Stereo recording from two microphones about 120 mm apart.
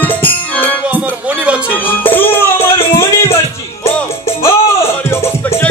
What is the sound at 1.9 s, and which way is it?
Music, 15° left (ahead or behind).